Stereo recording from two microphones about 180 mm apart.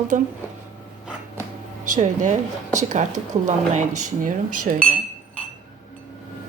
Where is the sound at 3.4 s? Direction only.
40° right (ahead or behind).